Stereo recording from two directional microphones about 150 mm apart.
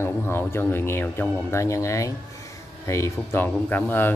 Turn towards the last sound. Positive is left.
turn(degrees=15)  # may be behind; listen again after turning